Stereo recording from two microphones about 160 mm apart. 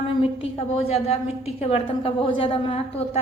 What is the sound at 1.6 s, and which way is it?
A woman's voice, 40° left (ahead or behind).